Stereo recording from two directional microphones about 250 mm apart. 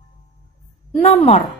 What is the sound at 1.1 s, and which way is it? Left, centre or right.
Speech, left.